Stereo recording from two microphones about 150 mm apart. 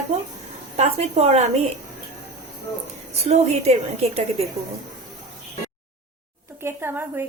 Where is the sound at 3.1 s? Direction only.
45° right (ahead or behind).